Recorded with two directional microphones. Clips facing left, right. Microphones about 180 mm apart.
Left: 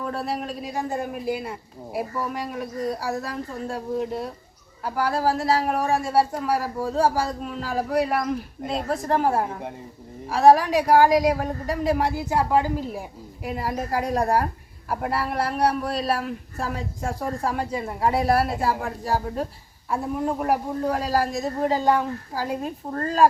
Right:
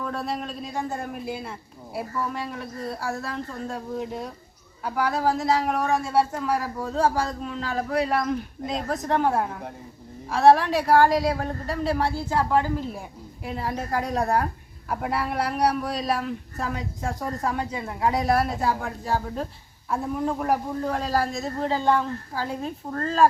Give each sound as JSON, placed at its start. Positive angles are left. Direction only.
{"t": 0.0, "sound": "a man's voice", "side_deg": 10}